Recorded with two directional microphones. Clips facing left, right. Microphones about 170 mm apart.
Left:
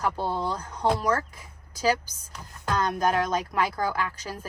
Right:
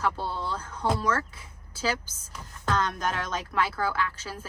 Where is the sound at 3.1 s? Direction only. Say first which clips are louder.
Left 6 dB; 35° left (ahead or behind).